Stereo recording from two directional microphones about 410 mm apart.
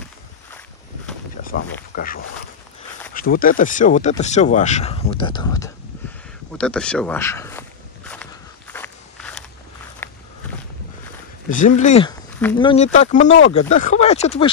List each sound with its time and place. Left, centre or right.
1.4 s speech: left
6.6 s walk: centre
11.4 s speech: centre